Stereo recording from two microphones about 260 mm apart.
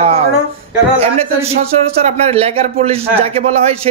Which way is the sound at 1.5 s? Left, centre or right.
Right.